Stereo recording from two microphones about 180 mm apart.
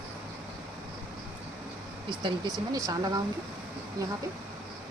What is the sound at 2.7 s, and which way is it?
Speech, 20° right (ahead or behind).